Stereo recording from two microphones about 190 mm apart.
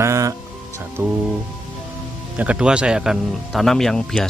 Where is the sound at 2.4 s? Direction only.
5° right (ahead or behind).